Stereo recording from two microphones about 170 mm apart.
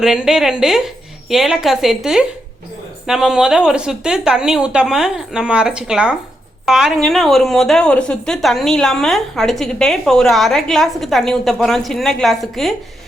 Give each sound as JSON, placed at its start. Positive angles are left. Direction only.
{"t": 0.0, "sound": "a woman's voice", "side_deg": -5}